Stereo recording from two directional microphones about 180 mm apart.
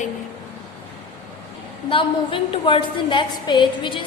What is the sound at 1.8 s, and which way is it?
A woman's voice, 30° left (ahead or behind).